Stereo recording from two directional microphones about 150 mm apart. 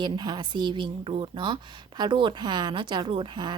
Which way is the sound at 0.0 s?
30° right (ahead or behind).